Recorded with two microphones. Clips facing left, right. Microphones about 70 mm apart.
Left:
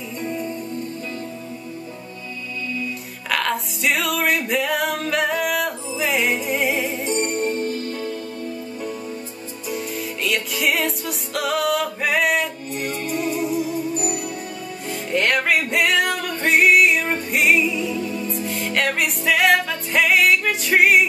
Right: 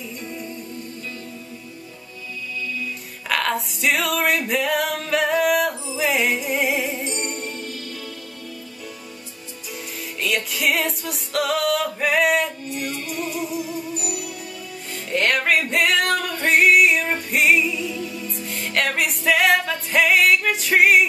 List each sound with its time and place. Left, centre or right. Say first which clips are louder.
0.2 s music: left 9 dB; left
3.3 s music: even; centre
7.1 s music: left 7 dB; left
9.9 s music: right 2 dB; centre
12.6 s music: left 2 dB; left
15.0 s music: even; centre
17.7 s music: left 4 dB; left
18.5 s music: even; centre